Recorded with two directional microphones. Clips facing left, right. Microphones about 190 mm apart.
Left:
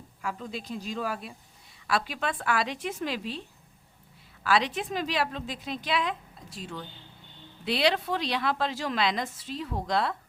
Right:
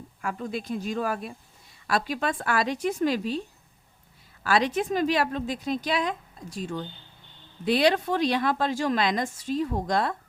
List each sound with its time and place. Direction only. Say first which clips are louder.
0.2 s speech: right 4 dB; 50° right (ahead or behind)
4.4 s speech: right 3 dB; 45° right (ahead or behind)